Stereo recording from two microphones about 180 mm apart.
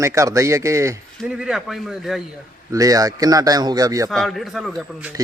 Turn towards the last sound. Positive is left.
turn(degrees=0)  # may be behind; listen again after turning